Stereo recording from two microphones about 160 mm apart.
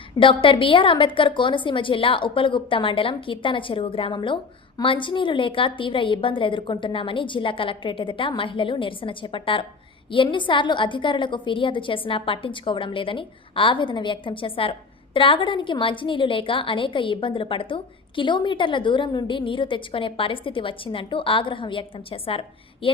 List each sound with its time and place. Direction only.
0.2 s a woman's voice: 30° left (ahead or behind)